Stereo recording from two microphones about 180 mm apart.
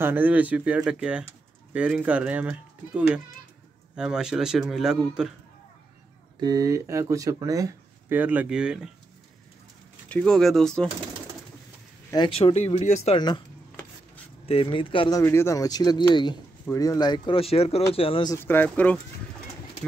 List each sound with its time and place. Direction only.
0.0 s a man's voice: 10° right (ahead or behind)
6.4 s speech: 20° right (ahead or behind); by 8.9 s 5° right (ahead or behind)
10.0 s a man's voice: 5° left (ahead or behind)
12.4 s speech: 35° left (ahead or behind)
14.4 s speech: 30° left (ahead or behind)
18.3 s speech: 10° left (ahead or behind)